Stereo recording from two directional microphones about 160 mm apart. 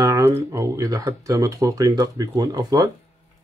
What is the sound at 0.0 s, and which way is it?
Speech, 20° right (ahead or behind).